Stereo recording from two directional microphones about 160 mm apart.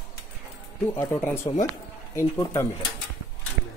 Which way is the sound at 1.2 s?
15° left (ahead or behind).